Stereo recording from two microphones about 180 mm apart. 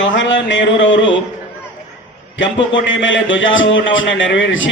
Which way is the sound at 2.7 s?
90° left.